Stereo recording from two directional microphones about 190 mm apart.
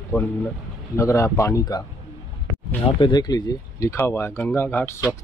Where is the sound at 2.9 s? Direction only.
20° left (ahead or behind).